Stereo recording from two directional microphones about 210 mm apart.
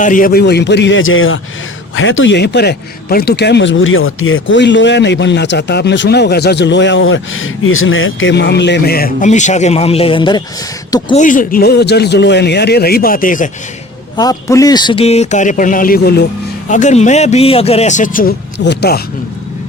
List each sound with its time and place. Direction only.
0.0 s speech: 40° left (ahead or behind); by 10.4 s 20° left (ahead or behind)
11.1 s a man's voice: 35° left (ahead or behind)
14.2 s a man's voice: 15° left (ahead or behind); by 16.2 s 45° left (ahead or behind)
16.6 s a man's voice: 35° left (ahead or behind)